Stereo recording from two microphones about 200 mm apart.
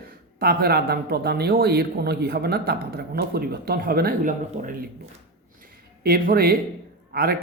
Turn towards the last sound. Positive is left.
turn(degrees=-50)  # may be behind; listen again after turning